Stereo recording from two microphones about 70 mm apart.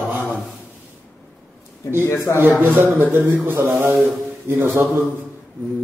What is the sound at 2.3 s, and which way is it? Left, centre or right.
Speech, left.